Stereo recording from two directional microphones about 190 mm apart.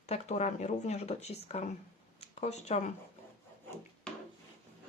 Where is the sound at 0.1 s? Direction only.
35° left (ahead or behind).